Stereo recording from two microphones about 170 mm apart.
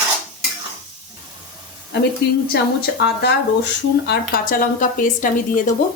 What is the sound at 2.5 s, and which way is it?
A woman's voice, 75° left (ahead or behind).